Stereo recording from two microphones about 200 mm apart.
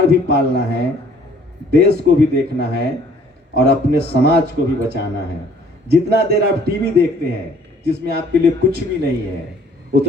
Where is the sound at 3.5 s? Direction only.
50° right (ahead or behind).